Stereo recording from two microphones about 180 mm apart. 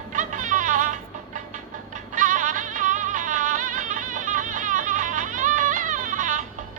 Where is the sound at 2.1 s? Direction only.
45° right (ahead or behind).